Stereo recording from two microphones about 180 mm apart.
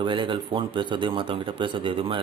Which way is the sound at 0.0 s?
25° right (ahead or behind).